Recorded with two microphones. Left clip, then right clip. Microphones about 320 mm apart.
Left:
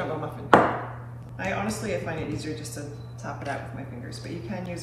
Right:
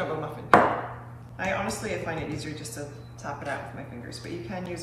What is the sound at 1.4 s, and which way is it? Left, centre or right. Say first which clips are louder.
Speech: right 1 dB; centre.